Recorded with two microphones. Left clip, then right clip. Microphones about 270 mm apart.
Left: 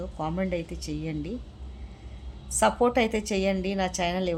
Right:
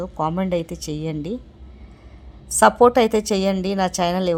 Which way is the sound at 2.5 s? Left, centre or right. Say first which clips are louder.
Right 9 dB; right.